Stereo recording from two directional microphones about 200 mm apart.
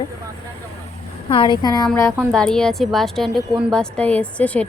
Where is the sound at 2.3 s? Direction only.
5° left (ahead or behind).